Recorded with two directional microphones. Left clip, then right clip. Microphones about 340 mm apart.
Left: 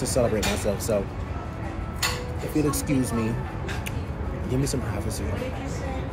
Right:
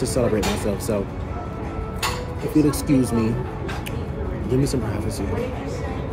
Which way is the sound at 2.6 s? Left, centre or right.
Centre.